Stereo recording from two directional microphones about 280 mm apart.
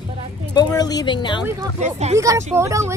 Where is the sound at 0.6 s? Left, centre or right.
Centre.